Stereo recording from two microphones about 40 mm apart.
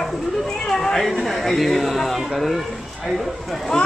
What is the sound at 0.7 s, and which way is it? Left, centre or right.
Speech, centre.